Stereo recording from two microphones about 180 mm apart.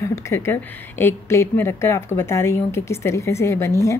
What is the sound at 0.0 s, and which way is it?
A woman's voice, 15° left (ahead or behind).